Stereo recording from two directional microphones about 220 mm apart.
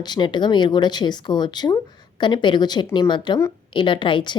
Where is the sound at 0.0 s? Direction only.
20° left (ahead or behind).